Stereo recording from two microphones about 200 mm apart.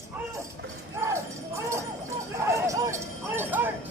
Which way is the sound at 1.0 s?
15° right (ahead or behind).